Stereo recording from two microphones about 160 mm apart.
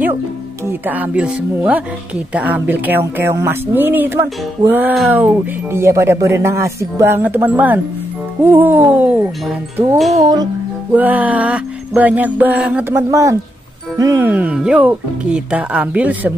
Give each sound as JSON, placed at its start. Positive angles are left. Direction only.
{"t": 0.7, "sound": "speech", "side_deg": -10}
{"t": 10.2, "sound": "music", "side_deg": -25}
{"t": 11.0, "sound": "speech", "side_deg": -10}
{"t": 13.1, "sound": "music", "side_deg": -20}
{"t": 13.9, "sound": "speech", "side_deg": -20}